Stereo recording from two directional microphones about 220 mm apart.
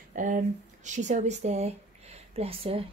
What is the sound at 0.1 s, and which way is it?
Speech, 35° right (ahead or behind).